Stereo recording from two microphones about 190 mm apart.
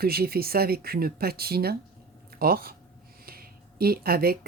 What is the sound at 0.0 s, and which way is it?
Speech, 55° right (ahead or behind).